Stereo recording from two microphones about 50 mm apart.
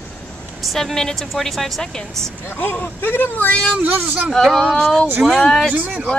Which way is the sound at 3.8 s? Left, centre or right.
Right.